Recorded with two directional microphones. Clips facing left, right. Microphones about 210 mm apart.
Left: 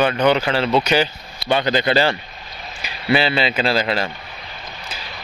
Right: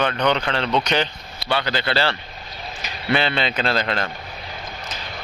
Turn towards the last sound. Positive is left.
turn(degrees=5)  # may be behind; listen again after turning